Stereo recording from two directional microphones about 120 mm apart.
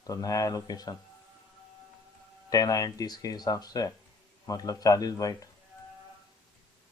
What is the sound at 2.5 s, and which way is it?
Speech, 30° left (ahead or behind).